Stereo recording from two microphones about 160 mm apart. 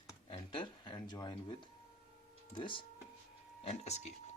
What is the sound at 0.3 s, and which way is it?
A man's voice, 35° left (ahead or behind).